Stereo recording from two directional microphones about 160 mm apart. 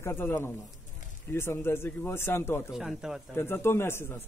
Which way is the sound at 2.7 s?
5° right (ahead or behind).